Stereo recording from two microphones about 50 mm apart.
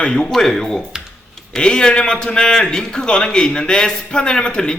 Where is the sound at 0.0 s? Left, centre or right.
Centre.